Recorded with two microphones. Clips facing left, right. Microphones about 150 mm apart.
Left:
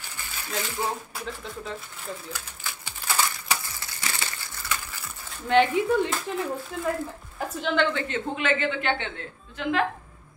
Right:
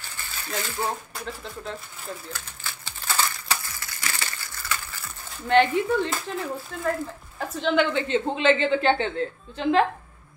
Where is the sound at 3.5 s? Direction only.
20° left (ahead or behind).